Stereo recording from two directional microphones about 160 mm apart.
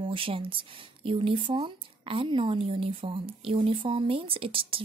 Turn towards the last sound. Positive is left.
turn(degrees=-35)  # may be behind; listen again after turning